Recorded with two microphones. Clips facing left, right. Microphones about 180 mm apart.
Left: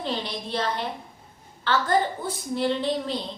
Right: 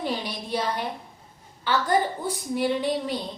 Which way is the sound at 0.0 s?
10° right (ahead or behind).